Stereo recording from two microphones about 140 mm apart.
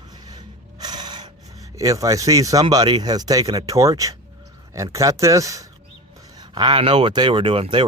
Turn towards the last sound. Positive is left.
turn(degrees=-40)  # may be behind; listen again after turning